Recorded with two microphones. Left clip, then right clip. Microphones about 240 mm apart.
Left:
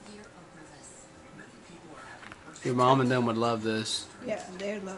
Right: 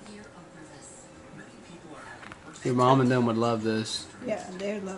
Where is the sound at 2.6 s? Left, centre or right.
Centre.